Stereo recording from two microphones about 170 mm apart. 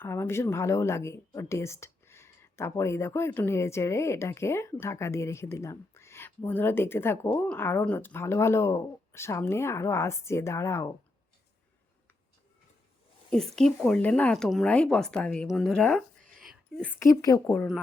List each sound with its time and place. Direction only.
0.0 s a woman's voice: 15° left (ahead or behind)
13.6 s speech: 5° left (ahead or behind)
16.4 s whispering: 5° right (ahead or behind)
16.8 s a woman's voice: 15° left (ahead or behind)